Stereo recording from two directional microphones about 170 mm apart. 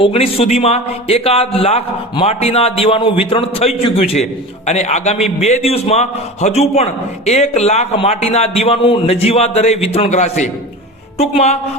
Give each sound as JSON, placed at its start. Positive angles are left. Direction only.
{"t": 0.0, "sound": "a man's voice", "side_deg": 35}